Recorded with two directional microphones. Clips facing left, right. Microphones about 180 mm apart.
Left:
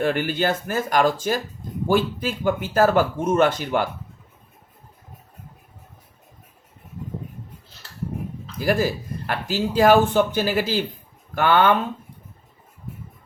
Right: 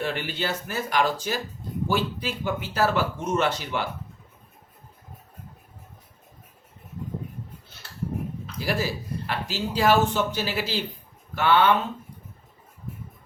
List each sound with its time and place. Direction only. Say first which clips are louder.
0.0 s speech: left 7 dB; 50° left (ahead or behind)
8.5 s speech: left 6 dB; 50° left (ahead or behind)